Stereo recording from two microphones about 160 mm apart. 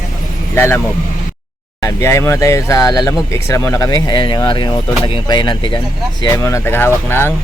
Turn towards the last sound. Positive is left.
turn(degrees=15)  # may be behind; listen again after turning